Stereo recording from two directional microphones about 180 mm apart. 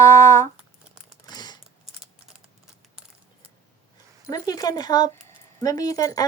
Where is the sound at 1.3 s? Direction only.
25° left (ahead or behind).